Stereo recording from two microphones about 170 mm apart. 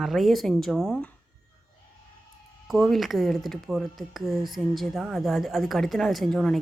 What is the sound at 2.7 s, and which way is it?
Speech, centre (ahead or behind).